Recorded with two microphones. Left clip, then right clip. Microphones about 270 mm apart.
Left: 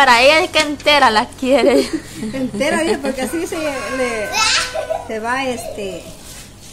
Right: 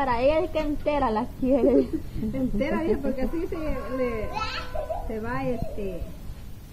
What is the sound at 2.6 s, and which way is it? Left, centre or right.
Speech, centre.